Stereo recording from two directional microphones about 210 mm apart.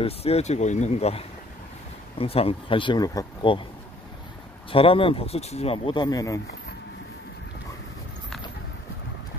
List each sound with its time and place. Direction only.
0.0 s speech: 30° left (ahead or behind)
4.6 s speech: 25° left (ahead or behind)